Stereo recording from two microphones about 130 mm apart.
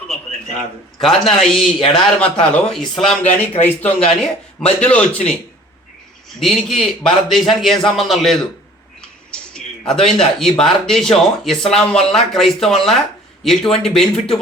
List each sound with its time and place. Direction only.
1.0 s speech: centre (ahead or behind)
1.8 s speech: 40° left (ahead or behind)
2.3 s speech: 10° left (ahead or behind)
3.6 s speech: 15° left (ahead or behind)
6.4 s speech: centre (ahead or behind)
9.0 s a sound: 5° left (ahead or behind)
10.6 s speech: 5° left (ahead or behind)